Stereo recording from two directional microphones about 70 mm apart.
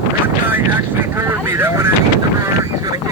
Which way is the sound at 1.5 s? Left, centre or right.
Right.